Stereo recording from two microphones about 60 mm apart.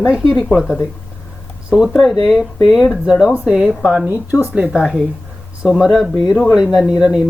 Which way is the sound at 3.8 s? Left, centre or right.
Right.